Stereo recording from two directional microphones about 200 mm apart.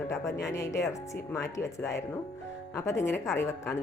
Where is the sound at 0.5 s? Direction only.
15° left (ahead or behind).